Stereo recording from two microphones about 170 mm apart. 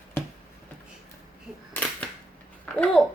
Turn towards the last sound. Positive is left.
turn(degrees=5)  # may be behind; listen again after turning